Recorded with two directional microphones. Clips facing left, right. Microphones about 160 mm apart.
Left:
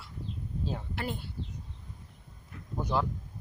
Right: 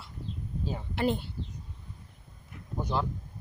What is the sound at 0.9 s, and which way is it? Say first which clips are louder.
Speech: right 8 dB; 20° right (ahead or behind).